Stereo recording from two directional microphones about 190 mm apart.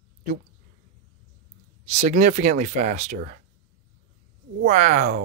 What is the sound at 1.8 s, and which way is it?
Speech, 35° right (ahead or behind).